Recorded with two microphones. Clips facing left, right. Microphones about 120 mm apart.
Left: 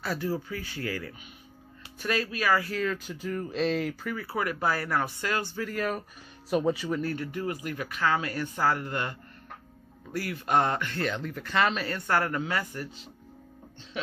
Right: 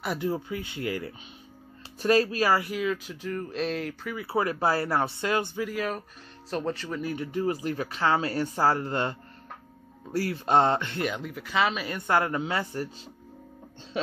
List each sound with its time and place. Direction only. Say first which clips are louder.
0.0 s speech: right 2 dB; 20° right (ahead or behind)
2.0 s speech: right 7 dB; 35° right (ahead or behind)
2.6 s speech: right 1 dB; 10° right (ahead or behind)
4.2 s speech: right 5 dB; 25° right (ahead or behind)
5.7 s speech: even; centre (ahead or behind)
7.0 s speech: even; 10° right (ahead or behind)
7.2 s speech: right 5 dB; 25° right (ahead or behind)
10.1 s speech: right 3 dB; 25° right (ahead or behind)